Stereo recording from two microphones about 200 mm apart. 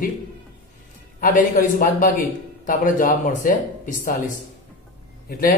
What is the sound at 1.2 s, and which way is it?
Speech, 45° left (ahead or behind).